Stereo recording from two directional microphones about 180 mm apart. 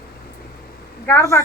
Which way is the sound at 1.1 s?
15° left (ahead or behind).